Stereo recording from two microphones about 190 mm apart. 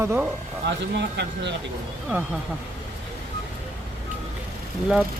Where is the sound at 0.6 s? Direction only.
65° right (ahead or behind).